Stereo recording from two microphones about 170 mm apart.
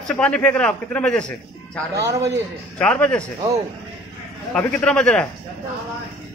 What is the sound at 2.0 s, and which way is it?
Speech, 20° right (ahead or behind).